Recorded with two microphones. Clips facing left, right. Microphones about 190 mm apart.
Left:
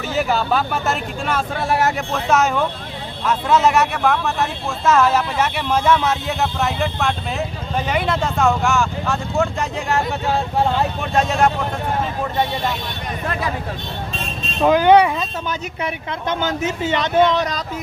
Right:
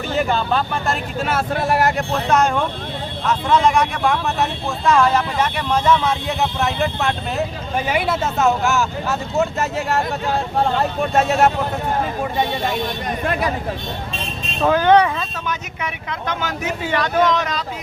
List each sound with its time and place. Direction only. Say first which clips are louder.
0.1 s speech: even; 5° left (ahead or behind)
11.1 s speech: right 1 dB; 5° right (ahead or behind)
14.6 s speech: left 2 dB; 15° left (ahead or behind)
15.4 s speech: left 2 dB; 30° left (ahead or behind)